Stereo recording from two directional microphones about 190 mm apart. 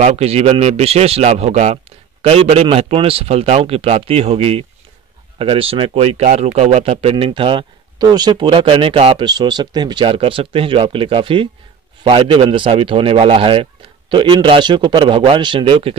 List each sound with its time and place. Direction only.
0.0 s speech: 35° right (ahead or behind)